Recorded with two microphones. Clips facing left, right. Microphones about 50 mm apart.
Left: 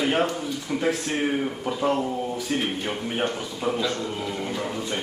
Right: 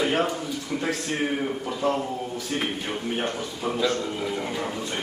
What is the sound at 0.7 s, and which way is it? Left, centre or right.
Speech, centre.